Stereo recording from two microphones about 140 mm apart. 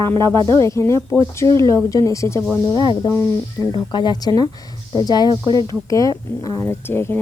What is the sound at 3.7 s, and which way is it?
A woman's voice, 30° left (ahead or behind).